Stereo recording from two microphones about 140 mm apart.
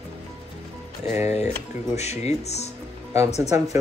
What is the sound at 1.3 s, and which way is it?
Speech, 50° left (ahead or behind).